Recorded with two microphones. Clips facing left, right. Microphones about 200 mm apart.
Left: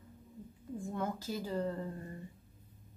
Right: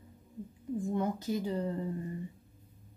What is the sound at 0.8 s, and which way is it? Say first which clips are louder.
Speech: right 5 dB; 20° right (ahead or behind).